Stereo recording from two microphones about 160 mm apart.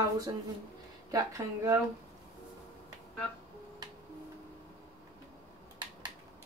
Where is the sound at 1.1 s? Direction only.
20° right (ahead or behind).